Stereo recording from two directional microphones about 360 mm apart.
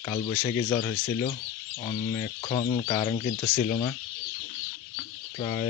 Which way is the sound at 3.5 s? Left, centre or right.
Left.